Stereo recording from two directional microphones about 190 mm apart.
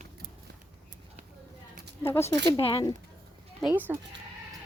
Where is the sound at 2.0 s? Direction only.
15° left (ahead or behind).